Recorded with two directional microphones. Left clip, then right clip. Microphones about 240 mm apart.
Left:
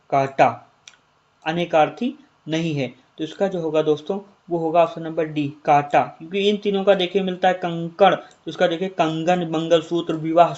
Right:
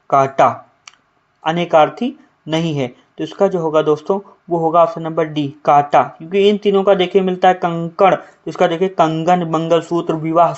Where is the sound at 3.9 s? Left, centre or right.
Right.